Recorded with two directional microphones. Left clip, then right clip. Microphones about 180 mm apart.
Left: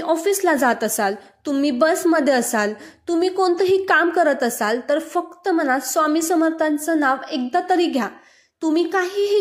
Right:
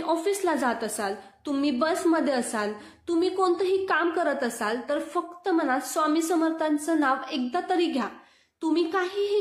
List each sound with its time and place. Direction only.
0.0 s a woman's voice: 30° left (ahead or behind)